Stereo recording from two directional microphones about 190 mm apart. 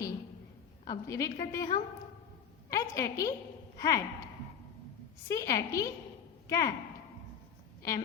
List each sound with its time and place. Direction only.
0.9 s a woman's voice: 15° left (ahead or behind)
5.3 s a woman's voice: 15° left (ahead or behind)
7.8 s a woman's voice: 15° left (ahead or behind)